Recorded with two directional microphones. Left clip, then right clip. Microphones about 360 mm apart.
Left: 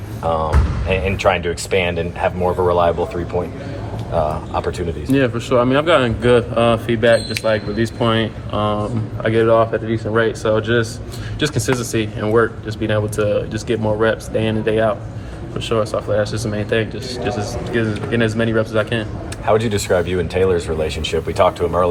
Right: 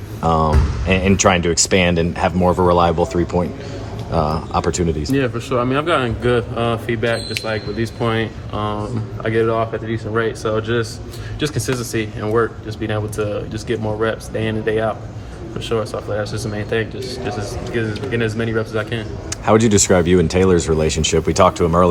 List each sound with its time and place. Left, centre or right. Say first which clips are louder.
0.9 s speech: right 2 dB; right
5.1 s a man's voice: left 5 dB; centre
19.5 s speech: right 2 dB; right